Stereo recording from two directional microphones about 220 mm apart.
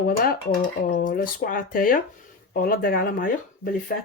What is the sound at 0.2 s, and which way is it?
Speech, 40° left (ahead or behind).